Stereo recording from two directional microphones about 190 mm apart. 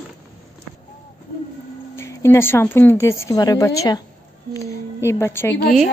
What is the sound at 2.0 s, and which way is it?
Speech, 15° left (ahead or behind).